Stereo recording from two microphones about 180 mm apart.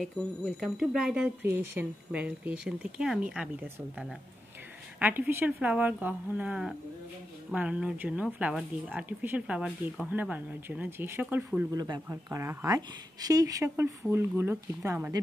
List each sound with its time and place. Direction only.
0.0 s speech: centre (ahead or behind)
11.7 s speech: 20° right (ahead or behind)